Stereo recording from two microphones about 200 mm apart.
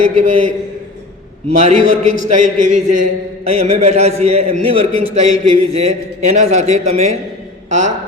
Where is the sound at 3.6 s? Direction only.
35° right (ahead or behind).